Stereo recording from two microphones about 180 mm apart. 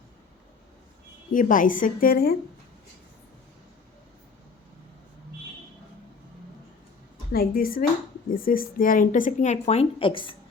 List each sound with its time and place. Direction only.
1.3 s a woman's voice: 45° left (ahead or behind)
7.3 s a woman's voice: 55° left (ahead or behind); by 10.3 s 30° left (ahead or behind)